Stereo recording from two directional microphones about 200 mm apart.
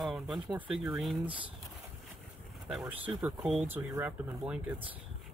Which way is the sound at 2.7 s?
5° right (ahead or behind).